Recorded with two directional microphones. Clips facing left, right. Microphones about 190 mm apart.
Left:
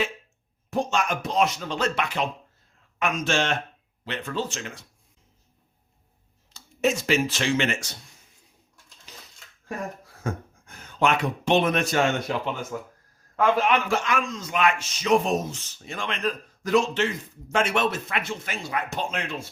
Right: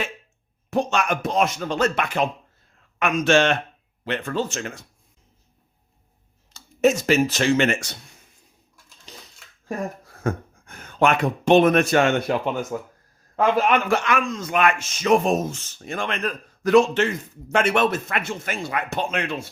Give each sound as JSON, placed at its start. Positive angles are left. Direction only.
{"t": 0.7, "sound": "a man's voice", "side_deg": -65}
{"t": 3.0, "sound": "a man's voice", "side_deg": -65}
{"t": 6.5, "sound": "speech", "side_deg": -45}
{"t": 10.1, "sound": "speech", "side_deg": -60}
{"t": 12.7, "sound": "speech", "side_deg": -30}
{"t": 13.6, "sound": "a man's voice", "side_deg": -50}